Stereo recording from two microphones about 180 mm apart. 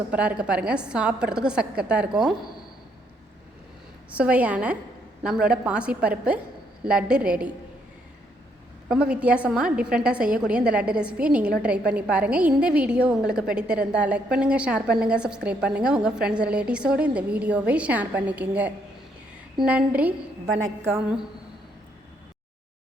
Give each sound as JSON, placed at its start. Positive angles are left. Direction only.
{"t": 0.1, "sound": "a woman's voice", "side_deg": -5}
{"t": 4.1, "sound": "a woman's voice", "side_deg": -5}
{"t": 8.9, "sound": "a woman's voice", "side_deg": -5}